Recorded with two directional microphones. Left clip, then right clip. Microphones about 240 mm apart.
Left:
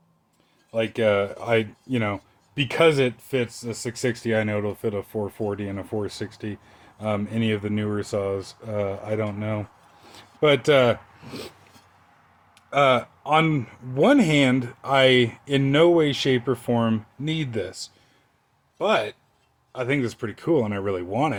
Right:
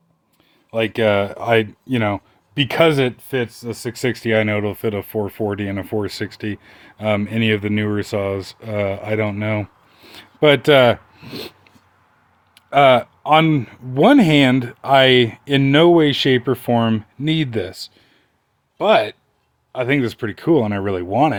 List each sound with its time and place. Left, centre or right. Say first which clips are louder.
0.7 s speech: right 5 dB; right
12.5 s speech: right 7 dB; right